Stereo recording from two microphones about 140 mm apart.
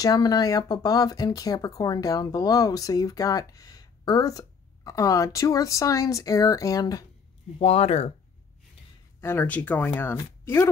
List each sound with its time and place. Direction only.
0.0 s speech: 30° left (ahead or behind)
7.5 s speech: 45° left (ahead or behind)
9.2 s speech: 15° left (ahead or behind)